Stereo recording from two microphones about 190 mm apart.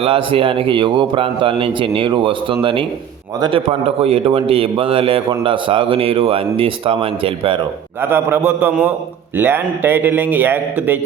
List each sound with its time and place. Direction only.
0.0 s a man's voice: 30° right (ahead or behind)
8.0 s a man's voice: 10° right (ahead or behind)